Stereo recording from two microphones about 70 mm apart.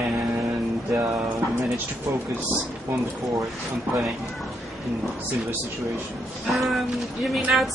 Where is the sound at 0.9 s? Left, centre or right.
Right.